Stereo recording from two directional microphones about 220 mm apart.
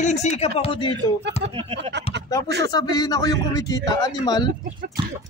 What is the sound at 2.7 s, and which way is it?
A man's voice, 15° left (ahead or behind).